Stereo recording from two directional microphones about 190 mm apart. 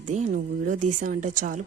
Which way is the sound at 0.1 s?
40° right (ahead or behind).